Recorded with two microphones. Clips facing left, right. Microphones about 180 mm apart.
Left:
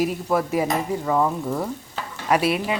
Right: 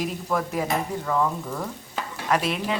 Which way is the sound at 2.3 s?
10° left (ahead or behind).